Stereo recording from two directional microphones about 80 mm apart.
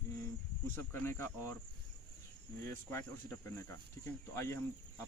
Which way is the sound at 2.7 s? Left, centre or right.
Left.